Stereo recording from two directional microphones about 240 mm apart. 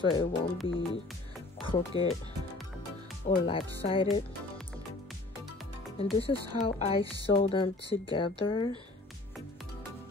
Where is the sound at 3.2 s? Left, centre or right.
Left.